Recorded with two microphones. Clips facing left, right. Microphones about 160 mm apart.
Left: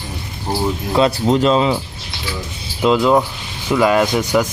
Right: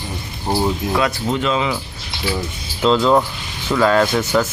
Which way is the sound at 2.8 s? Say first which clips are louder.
Left 1 dB; 10° left (ahead or behind).